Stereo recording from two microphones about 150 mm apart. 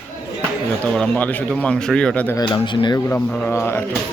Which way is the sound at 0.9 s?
5° left (ahead or behind).